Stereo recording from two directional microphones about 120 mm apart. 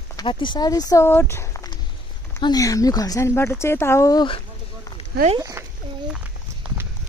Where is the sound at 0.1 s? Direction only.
40° left (ahead or behind).